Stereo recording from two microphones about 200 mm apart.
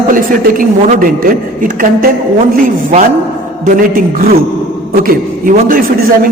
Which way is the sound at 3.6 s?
40° right (ahead or behind).